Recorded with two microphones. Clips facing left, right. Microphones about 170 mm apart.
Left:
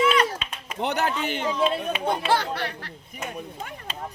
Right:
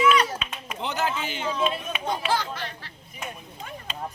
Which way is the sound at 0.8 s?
60° left (ahead or behind).